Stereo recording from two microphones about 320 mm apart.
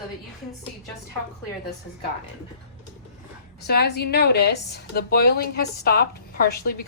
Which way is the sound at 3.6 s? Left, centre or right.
Left.